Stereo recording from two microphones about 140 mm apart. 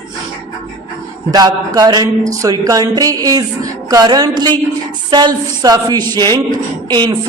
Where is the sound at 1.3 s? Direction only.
25° right (ahead or behind).